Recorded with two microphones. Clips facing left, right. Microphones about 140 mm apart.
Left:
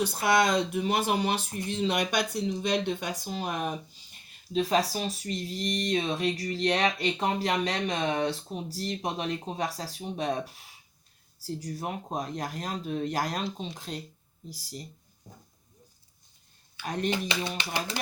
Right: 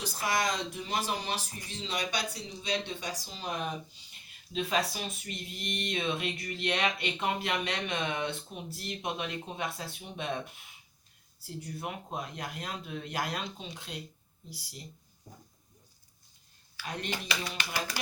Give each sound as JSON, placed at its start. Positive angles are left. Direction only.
{"t": 0.0, "sound": "speech", "side_deg": 65}
{"t": 4.5, "sound": "speech", "side_deg": 35}
{"t": 17.1, "sound": "speech", "side_deg": 25}